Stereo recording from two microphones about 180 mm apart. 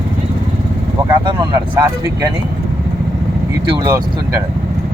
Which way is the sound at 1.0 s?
25° right (ahead or behind).